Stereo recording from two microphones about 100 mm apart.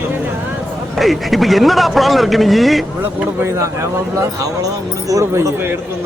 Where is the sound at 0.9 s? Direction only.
Centre (ahead or behind).